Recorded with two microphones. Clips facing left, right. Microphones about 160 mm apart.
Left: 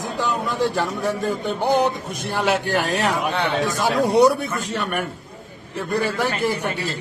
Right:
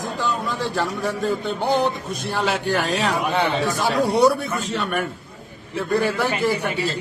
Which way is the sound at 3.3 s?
Centre (ahead or behind).